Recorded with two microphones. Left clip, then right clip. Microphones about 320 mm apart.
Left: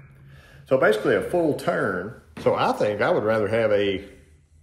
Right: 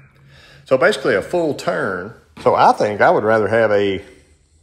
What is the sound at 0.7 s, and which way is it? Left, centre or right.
Speech, right.